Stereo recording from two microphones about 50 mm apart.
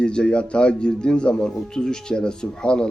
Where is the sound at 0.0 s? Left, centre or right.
Centre.